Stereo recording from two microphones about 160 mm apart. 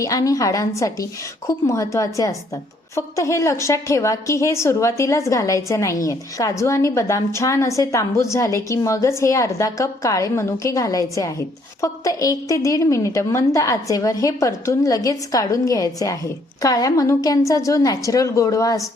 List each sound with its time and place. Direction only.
0.0 s a woman's voice: 20° left (ahead or behind)